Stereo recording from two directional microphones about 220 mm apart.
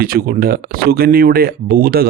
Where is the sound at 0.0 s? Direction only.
40° right (ahead or behind).